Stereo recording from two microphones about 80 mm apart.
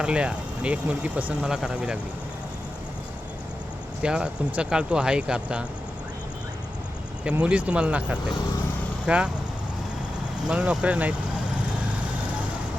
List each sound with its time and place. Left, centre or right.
0.0 s speech: centre
4.0 s speech: centre
7.4 s speech: centre
10.5 s speech: centre